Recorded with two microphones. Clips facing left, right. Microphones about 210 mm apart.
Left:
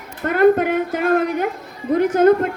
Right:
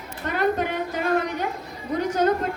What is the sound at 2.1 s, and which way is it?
Speech, 55° left (ahead or behind).